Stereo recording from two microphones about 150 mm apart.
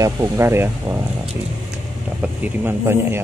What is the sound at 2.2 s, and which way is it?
Speech, 10° right (ahead or behind).